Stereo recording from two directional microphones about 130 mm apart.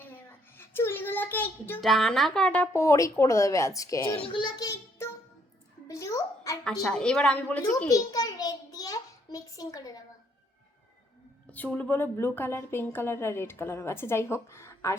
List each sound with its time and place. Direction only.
0.0 s a sound: 15° left (ahead or behind)
1.8 s a woman's voice: centre (ahead or behind)
2.7 s a woman's voice: 25° left (ahead or behind)
4.2 s a child's voice: 40° left (ahead or behind)
5.9 s babbling: 25° left (ahead or behind)
6.7 s a woman's voice: 5° left (ahead or behind)
7.9 s a sound: 25° left (ahead or behind)
11.5 s a woman's voice: 10° left (ahead or behind)